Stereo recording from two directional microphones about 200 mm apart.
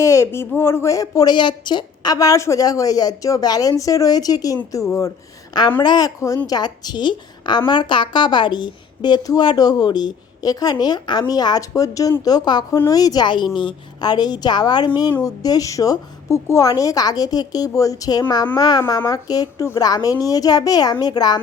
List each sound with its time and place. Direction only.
0.0 s a woman's voice: 15° left (ahead or behind)